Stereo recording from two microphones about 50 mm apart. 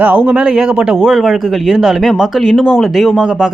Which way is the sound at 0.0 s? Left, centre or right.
Right.